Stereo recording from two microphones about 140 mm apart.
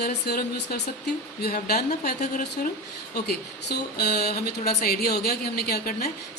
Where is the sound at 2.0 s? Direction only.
90° left.